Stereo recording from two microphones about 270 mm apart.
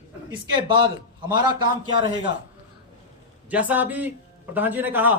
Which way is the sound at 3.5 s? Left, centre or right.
Centre.